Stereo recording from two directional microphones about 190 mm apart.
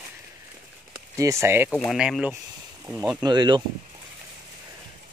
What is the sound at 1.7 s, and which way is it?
Speech, centre (ahead or behind).